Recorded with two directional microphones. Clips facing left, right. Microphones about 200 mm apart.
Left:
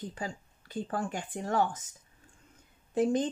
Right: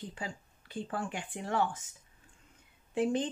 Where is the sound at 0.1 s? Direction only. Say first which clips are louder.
Left 3 dB; 40° left (ahead or behind).